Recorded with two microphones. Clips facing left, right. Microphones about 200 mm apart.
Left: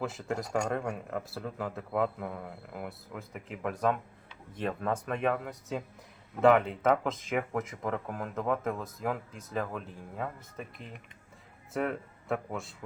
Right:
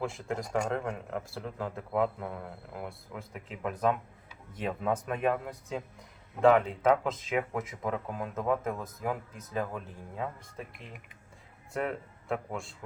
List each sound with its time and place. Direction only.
0.0 s speech: centre (ahead or behind)
11.7 s speech: centre (ahead or behind)